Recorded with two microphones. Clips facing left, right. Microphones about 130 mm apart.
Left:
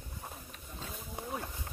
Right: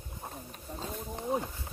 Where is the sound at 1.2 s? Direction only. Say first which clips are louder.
Right 8 dB; 25° right (ahead or behind).